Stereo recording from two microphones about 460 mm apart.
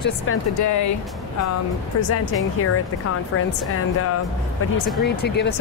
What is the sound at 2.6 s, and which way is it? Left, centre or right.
Speech, left.